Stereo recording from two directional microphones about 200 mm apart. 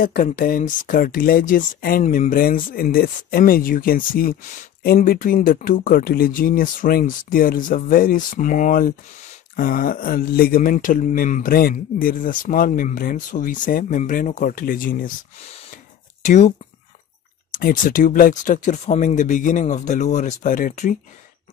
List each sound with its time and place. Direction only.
0.0 s speech: 45° left (ahead or behind)